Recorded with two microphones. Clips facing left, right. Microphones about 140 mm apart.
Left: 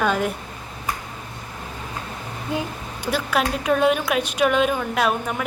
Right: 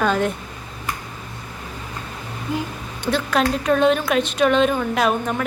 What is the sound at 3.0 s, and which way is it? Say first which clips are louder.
A woman's voice: right 3 dB; 10° left (ahead or behind).